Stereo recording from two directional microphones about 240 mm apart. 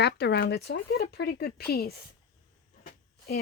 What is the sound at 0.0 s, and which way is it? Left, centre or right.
Speech, left.